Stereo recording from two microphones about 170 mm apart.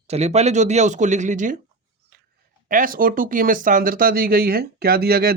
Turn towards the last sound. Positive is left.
turn(degrees=-65)  # may be behind; listen again after turning